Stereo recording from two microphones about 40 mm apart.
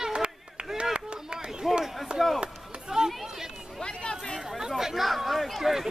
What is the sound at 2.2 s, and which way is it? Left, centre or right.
Chop, centre.